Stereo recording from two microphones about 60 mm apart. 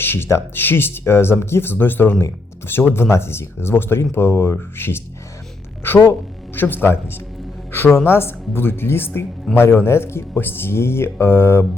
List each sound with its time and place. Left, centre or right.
0.0 s speech: left
8.0 s speech: left